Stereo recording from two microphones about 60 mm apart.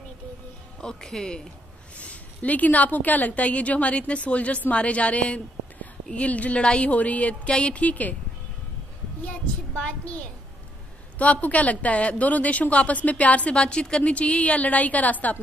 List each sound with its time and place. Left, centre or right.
0.7 s speech: centre
2.0 s a woman's voice: left
9.8 s a woman's voice: centre